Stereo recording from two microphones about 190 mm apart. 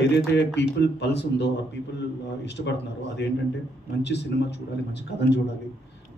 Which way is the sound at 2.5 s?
60° left (ahead or behind).